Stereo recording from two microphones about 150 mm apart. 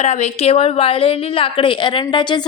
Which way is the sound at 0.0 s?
50° left (ahead or behind).